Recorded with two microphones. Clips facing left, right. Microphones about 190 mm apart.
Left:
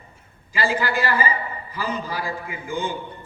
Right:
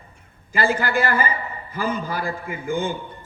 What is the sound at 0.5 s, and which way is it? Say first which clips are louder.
A man's voice: right 2 dB; 50° right (ahead or behind).